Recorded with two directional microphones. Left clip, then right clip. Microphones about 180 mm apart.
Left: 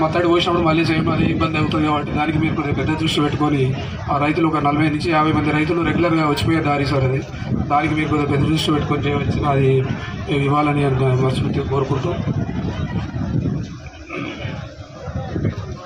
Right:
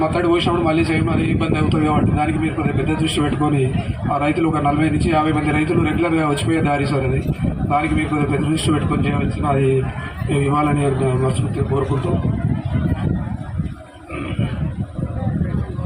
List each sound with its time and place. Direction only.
0.0 s a man's voice: 25° left (ahead or behind)